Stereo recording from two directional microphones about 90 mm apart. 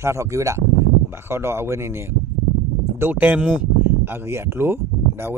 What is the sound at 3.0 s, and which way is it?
Speech, 20° right (ahead or behind).